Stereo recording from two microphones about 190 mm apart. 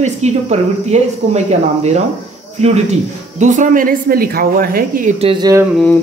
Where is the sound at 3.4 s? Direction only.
40° right (ahead or behind).